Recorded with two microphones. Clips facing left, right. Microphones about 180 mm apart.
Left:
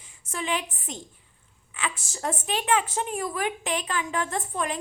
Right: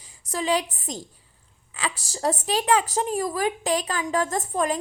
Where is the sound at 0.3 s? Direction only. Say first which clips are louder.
Right 5 dB; 35° right (ahead or behind).